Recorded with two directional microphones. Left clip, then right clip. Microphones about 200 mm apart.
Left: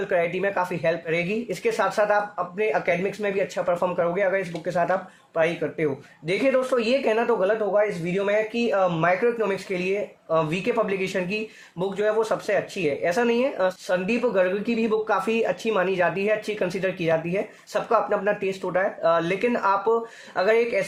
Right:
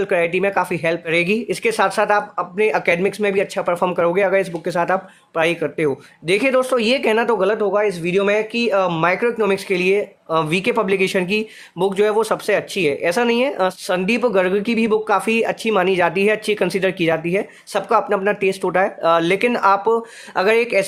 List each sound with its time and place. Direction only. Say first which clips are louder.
0.0 s speech: right 6 dB; 35° right (ahead or behind)